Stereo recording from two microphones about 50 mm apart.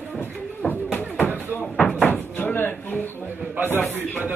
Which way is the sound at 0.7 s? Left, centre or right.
Left.